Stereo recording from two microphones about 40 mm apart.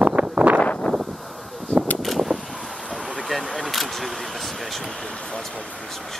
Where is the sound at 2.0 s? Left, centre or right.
Centre.